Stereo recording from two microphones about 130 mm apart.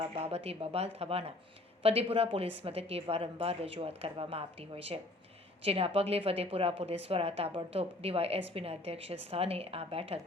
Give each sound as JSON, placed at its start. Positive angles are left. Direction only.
{"t": 0.0, "sound": "a woman's voice", "side_deg": -50}